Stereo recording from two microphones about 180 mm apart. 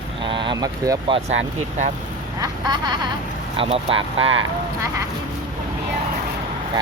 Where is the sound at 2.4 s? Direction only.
25° right (ahead or behind).